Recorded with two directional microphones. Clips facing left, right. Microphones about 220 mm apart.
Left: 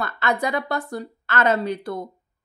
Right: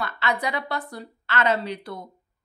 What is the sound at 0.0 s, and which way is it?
Speech, 50° left (ahead or behind).